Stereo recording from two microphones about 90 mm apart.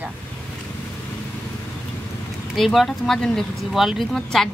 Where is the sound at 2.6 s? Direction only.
Centre (ahead or behind).